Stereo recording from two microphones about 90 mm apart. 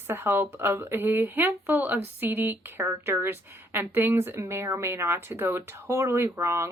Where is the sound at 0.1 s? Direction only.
25° right (ahead or behind).